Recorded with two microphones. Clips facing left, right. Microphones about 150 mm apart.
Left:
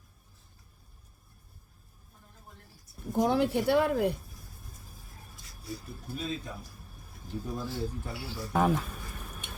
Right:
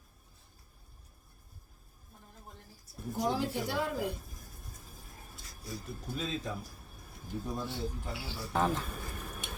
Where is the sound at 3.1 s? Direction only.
60° left (ahead or behind).